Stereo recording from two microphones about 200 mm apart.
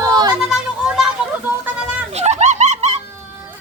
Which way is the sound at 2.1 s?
35° right (ahead or behind).